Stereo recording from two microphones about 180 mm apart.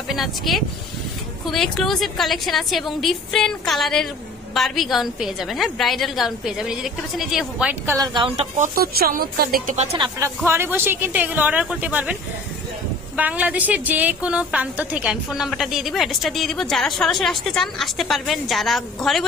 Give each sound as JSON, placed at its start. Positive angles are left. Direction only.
{"t": 0.1, "sound": "a woman's voice", "side_deg": 0}
{"t": 8.1, "sound": "speech", "side_deg": -25}
{"t": 8.5, "sound": "speech", "side_deg": -55}
{"t": 9.8, "sound": "speech", "side_deg": -30}
{"t": 10.4, "sound": "a woman's voice", "side_deg": -15}